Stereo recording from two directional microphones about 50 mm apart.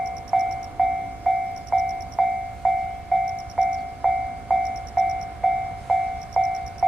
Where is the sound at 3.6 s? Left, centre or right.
Centre.